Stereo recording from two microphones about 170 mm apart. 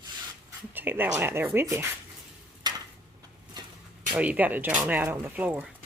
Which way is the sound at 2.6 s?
25° right (ahead or behind).